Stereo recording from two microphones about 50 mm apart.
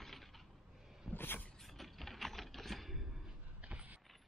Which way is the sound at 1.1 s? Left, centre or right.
Left.